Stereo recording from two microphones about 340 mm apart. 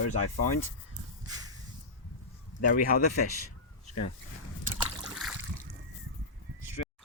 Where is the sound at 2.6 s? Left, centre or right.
Left.